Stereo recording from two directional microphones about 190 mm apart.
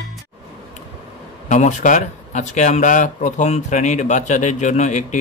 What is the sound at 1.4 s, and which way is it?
Speech, 40° left (ahead or behind).